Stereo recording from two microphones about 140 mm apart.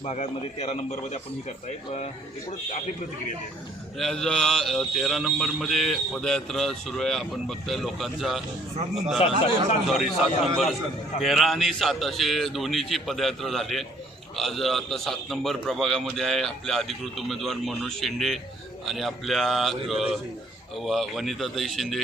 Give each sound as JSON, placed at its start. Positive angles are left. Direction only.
{"t": 0.0, "sound": "a man's voice", "side_deg": 55}
{"t": 3.9, "sound": "speech", "side_deg": 5}
{"t": 9.1, "sound": "a man's voice", "side_deg": 45}
{"t": 9.8, "sound": "speech", "side_deg": 0}